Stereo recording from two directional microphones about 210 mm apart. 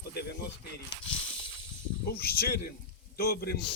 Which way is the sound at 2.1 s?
45° left (ahead or behind).